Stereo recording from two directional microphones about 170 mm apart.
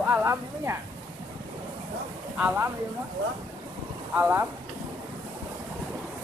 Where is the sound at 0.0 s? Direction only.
15° right (ahead or behind).